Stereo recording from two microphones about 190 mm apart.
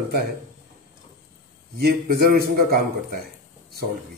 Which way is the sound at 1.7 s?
50° right (ahead or behind).